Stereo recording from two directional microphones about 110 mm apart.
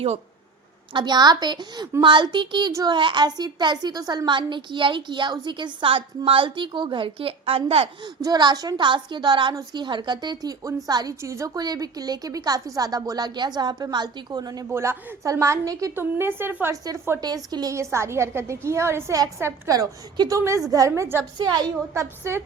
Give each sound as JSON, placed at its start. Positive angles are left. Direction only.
{"t": 0.9, "sound": "a woman's voice", "side_deg": -40}
{"t": 8.2, "sound": "a woman's voice", "side_deg": -40}
{"t": 11.2, "sound": "a woman's voice", "side_deg": -25}
{"t": 14.7, "sound": "a woman's voice", "side_deg": -25}
{"t": 16.0, "sound": "a woman's voice", "side_deg": -20}
{"t": 17.2, "sound": "a woman's voice", "side_deg": -35}
{"t": 21.3, "sound": "a woman's voice", "side_deg": -40}